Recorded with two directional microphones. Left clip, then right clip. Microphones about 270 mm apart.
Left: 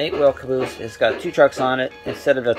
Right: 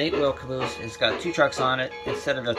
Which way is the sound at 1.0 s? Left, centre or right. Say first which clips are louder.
Left 7 dB; centre.